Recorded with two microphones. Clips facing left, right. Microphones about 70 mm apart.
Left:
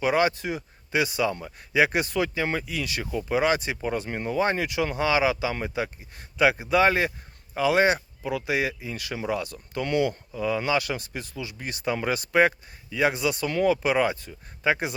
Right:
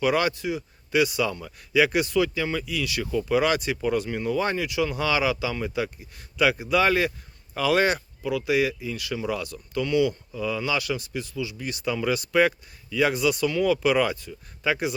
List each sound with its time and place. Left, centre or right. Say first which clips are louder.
0.0 s speech: even; left
0.3 s speech: right 2 dB; left
0.9 s speech: right 2 dB; left